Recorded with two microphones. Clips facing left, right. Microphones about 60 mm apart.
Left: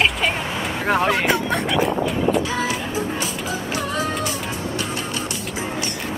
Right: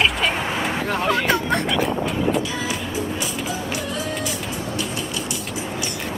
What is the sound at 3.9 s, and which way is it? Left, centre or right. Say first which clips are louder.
Music: left 3 dB; left.